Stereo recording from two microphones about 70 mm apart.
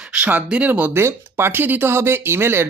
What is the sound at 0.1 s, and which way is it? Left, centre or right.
Speech, right.